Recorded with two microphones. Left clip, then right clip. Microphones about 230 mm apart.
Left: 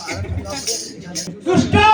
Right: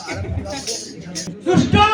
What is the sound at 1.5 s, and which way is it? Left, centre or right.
Music, centre.